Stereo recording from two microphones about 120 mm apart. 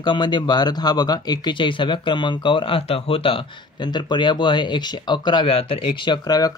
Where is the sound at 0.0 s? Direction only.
40° left (ahead or behind).